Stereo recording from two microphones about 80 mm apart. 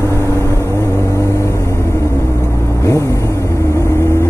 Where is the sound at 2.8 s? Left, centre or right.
Left.